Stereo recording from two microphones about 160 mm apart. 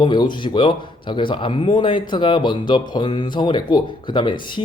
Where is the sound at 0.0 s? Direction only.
30° left (ahead or behind).